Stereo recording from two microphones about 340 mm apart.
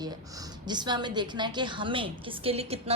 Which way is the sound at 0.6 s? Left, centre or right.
Centre.